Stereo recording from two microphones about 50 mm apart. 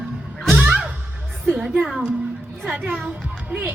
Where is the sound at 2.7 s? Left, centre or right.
Right.